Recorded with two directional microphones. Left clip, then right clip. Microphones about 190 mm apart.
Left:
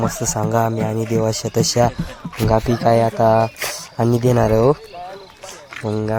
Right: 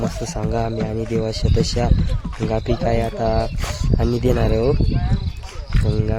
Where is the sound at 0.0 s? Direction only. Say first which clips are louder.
Left 5 dB; 10° left (ahead or behind).